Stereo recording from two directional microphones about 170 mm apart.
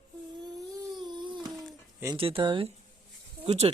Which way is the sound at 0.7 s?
20° right (ahead or behind).